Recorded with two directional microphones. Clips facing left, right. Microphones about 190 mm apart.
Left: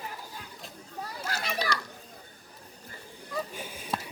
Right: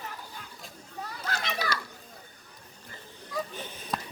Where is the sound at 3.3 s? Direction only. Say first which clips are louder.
Even; 10° left (ahead or behind).